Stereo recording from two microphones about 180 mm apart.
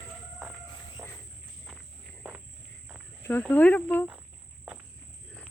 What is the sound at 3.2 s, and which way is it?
Speech, 10° left (ahead or behind).